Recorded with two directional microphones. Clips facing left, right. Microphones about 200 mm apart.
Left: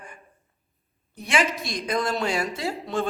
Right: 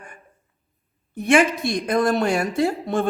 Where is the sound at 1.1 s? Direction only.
55° right (ahead or behind).